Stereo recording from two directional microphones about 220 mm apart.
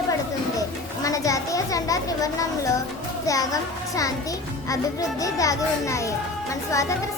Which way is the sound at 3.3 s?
15° left (ahead or behind).